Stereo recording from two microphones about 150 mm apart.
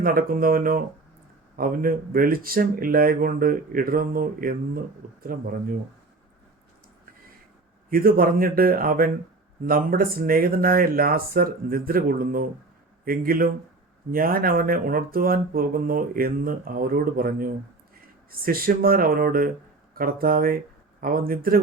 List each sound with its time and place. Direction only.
0.0 s speech: 70° right (ahead or behind)
7.9 s speech: 75° right (ahead or behind)